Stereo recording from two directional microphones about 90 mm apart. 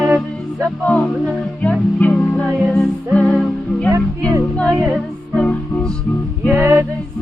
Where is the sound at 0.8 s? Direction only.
15° left (ahead or behind).